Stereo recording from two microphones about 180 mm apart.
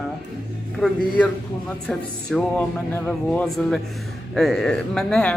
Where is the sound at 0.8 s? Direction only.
5° left (ahead or behind).